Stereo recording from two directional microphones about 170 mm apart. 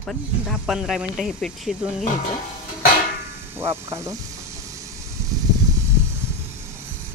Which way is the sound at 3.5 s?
15° right (ahead or behind).